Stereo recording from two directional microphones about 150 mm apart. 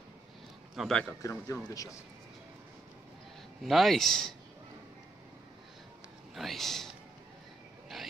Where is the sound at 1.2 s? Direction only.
20° left (ahead or behind).